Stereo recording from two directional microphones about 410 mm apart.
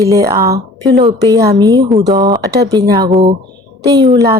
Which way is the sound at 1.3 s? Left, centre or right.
Right.